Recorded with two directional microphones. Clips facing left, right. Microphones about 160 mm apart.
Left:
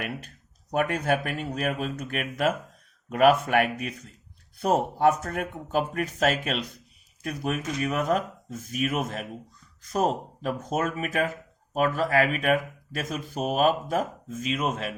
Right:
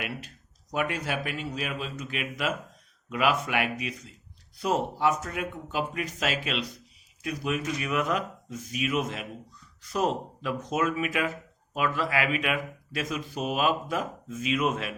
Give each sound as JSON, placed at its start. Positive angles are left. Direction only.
{"t": 0.7, "sound": "speech", "side_deg": 50}